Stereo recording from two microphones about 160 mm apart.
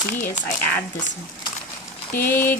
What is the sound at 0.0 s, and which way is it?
Speech, 50° left (ahead or behind).